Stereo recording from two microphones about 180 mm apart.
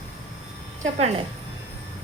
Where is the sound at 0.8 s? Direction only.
35° right (ahead or behind).